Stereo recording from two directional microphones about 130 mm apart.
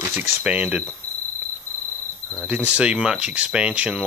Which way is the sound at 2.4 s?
10° right (ahead or behind).